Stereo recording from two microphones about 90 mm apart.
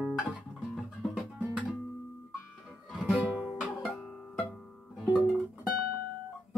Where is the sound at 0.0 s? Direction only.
5° right (ahead or behind).